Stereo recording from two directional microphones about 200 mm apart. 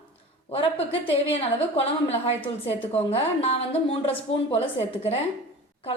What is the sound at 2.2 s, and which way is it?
A woman's voice, 25° left (ahead or behind).